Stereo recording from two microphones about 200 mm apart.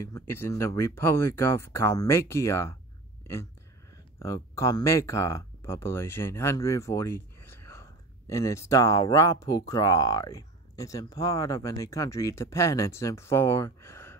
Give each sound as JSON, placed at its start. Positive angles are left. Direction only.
{"t": 0.0, "sound": "speech", "side_deg": 15}
{"t": 4.2, "sound": "speech", "side_deg": 15}